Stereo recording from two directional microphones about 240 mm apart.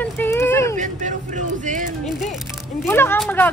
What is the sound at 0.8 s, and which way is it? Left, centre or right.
Speech, right.